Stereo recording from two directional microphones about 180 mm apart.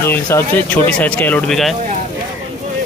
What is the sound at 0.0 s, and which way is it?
Speech, 15° left (ahead or behind).